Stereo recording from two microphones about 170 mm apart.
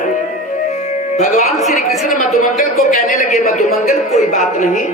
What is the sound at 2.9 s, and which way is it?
A man's voice, 50° left (ahead or behind).